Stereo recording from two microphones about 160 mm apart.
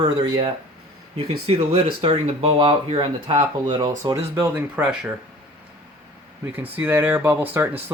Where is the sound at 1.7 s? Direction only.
35° right (ahead or behind).